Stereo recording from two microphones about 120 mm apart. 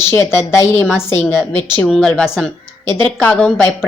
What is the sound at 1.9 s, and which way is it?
A woman's voice, 5° left (ahead or behind).